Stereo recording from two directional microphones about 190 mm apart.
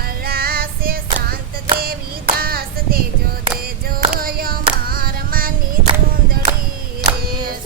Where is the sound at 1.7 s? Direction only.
50° right (ahead or behind).